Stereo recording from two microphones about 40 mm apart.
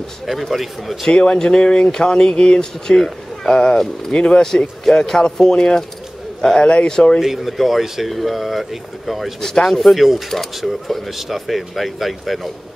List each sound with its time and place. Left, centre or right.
0.3 s speech: centre
1.0 s speech: left
4.1 s speech: left
4.4 s speech: centre; by 6.9 s left
6.9 s speech: centre
7.2 s speech: centre
9.4 s speech: centre
9.7 s speech: centre